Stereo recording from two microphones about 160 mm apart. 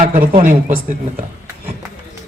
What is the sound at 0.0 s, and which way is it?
Speech, 60° right (ahead or behind).